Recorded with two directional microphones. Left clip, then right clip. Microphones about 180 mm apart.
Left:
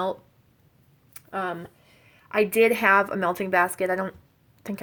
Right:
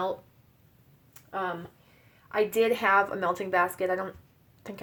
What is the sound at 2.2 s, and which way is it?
Speech, 50° left (ahead or behind).